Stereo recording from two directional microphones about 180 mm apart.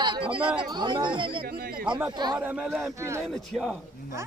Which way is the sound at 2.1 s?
25° right (ahead or behind).